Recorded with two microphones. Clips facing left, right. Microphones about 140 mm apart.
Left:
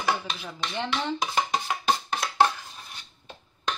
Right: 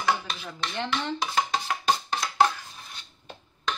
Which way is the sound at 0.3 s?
5° left (ahead or behind).